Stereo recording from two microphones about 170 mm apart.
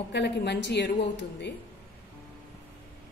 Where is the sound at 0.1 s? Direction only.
90° left.